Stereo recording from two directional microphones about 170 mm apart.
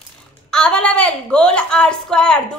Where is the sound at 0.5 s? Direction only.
5° left (ahead or behind).